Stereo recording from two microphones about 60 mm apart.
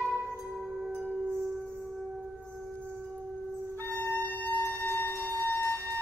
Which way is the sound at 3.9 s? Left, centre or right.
Left.